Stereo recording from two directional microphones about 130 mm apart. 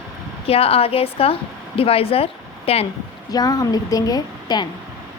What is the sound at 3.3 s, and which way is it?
A woman's voice, 30° left (ahead or behind).